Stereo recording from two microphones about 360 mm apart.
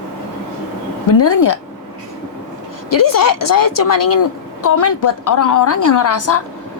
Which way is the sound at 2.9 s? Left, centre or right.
Left.